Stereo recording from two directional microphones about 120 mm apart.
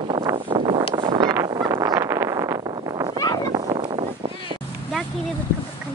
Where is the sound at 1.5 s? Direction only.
30° right (ahead or behind).